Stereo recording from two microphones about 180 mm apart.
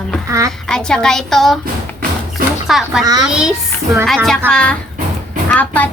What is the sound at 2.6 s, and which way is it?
Speech, centre (ahead or behind).